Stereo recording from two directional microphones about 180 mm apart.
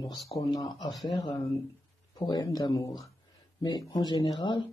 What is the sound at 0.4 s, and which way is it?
Speech, 20° left (ahead or behind).